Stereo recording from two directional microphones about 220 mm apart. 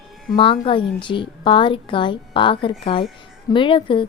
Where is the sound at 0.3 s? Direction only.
25° left (ahead or behind).